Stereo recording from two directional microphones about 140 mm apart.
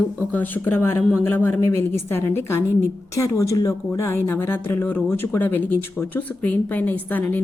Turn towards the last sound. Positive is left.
turn(degrees=15)  # may be behind; listen again after turning